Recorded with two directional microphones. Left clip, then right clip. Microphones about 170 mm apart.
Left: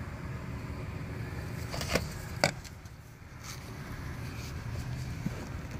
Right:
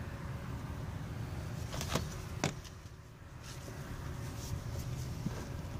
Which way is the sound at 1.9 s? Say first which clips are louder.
Left 7 dB; 25° left (ahead or behind).